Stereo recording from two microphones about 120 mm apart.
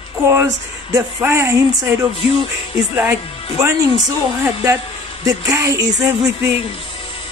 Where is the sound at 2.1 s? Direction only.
50° left (ahead or behind).